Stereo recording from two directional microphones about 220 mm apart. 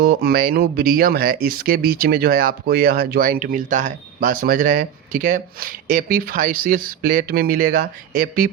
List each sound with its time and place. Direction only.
0.0 s speech: 45° right (ahead or behind)